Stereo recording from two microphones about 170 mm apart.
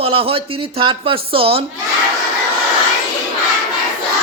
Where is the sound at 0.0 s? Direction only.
35° right (ahead or behind).